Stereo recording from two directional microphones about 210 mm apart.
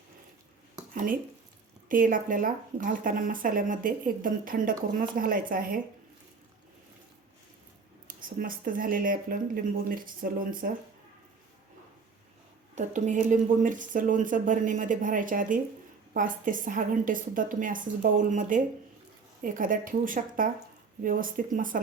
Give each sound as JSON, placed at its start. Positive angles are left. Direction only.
{"t": 0.9, "sound": "speech", "side_deg": -40}
{"t": 8.0, "sound": "speech", "side_deg": -40}
{"t": 12.7, "sound": "speech", "side_deg": -35}